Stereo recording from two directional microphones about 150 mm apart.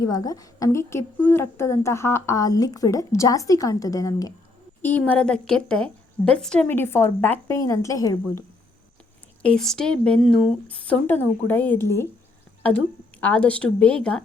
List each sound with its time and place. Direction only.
0.0 s a woman's voice: 25° left (ahead or behind)
4.8 s a woman's voice: 10° left (ahead or behind)
9.4 s a woman's voice: 5° left (ahead or behind)